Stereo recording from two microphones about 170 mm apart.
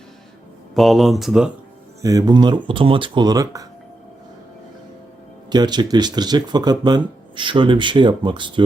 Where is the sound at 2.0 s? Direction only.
20° right (ahead or behind).